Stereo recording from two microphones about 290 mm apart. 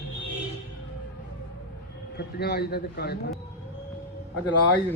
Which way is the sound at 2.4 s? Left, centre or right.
Left.